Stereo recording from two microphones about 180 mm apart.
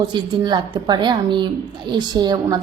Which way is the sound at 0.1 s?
25° right (ahead or behind).